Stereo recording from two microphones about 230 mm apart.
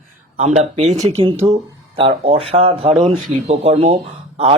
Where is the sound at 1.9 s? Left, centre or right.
Right.